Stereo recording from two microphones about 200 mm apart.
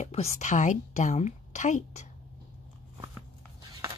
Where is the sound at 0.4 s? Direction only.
40° left (ahead or behind).